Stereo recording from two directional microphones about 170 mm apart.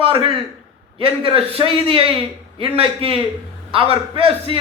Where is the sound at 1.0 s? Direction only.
35° right (ahead or behind).